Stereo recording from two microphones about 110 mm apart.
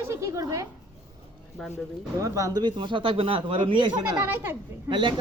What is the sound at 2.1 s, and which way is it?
A man's voice, 30° right (ahead or behind).